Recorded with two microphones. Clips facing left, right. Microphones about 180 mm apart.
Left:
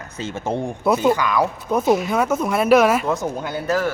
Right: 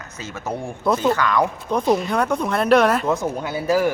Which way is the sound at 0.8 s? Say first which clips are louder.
Left 1 dB; 10° left (ahead or behind).